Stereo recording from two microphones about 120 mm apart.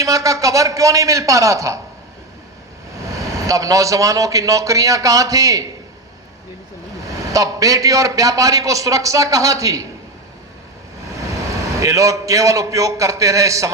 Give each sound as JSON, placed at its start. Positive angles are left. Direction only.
{"t": 0.0, "sound": "a man's voice", "side_deg": -30}
{"t": 3.3, "sound": "a man's voice", "side_deg": -30}
{"t": 7.3, "sound": "a man's voice", "side_deg": -30}
{"t": 11.8, "sound": "a man's voice", "side_deg": -25}